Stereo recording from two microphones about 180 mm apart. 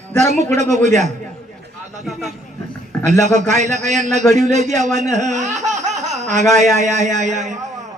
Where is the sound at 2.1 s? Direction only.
Centre (ahead or behind).